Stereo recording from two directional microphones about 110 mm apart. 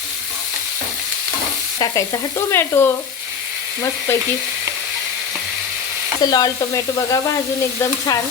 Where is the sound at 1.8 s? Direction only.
30° left (ahead or behind).